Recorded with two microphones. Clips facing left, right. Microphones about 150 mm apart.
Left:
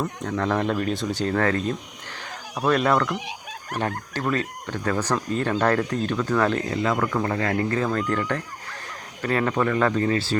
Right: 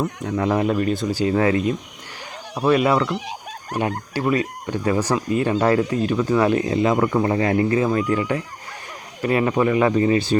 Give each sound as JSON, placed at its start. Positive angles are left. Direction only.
{"t": 0.0, "sound": "speech", "side_deg": -15}
{"t": 3.2, "sound": "fowl", "side_deg": -35}
{"t": 4.1, "sound": "speech", "side_deg": -10}